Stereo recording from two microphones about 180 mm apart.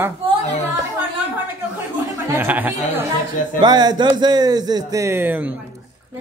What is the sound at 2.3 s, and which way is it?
Speech, 10° right (ahead or behind).